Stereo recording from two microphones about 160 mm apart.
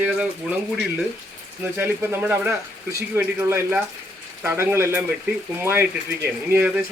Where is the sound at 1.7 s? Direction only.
10° right (ahead or behind).